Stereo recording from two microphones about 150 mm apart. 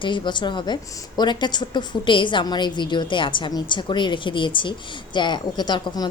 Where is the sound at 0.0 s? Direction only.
30° left (ahead or behind).